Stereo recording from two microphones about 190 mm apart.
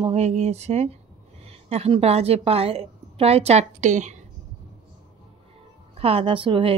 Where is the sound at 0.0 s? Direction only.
35° right (ahead or behind).